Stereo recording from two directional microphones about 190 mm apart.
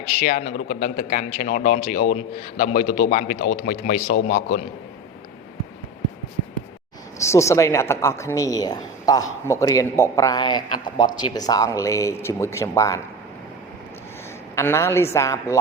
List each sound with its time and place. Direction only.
0.2 s a man's voice: 45° left (ahead or behind)
7.2 s speech: 15° left (ahead or behind)
14.5 s speech: 15° left (ahead or behind)